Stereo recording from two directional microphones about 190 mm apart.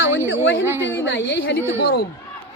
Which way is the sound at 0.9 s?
70° left (ahead or behind).